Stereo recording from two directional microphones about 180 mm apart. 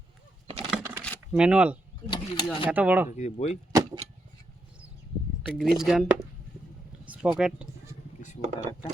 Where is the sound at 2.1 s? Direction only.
25° left (ahead or behind).